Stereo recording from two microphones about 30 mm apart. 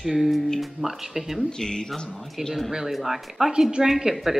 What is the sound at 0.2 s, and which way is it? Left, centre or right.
Speech, centre.